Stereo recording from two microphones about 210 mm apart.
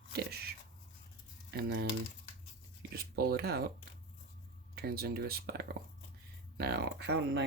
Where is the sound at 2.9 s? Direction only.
50° right (ahead or behind).